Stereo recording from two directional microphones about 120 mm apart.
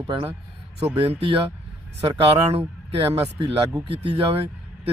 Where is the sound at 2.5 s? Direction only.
50° right (ahead or behind).